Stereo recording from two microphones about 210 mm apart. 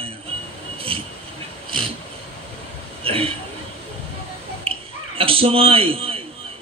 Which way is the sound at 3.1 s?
25° right (ahead or behind).